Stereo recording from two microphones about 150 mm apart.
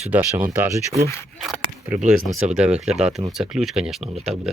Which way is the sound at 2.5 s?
5° right (ahead or behind).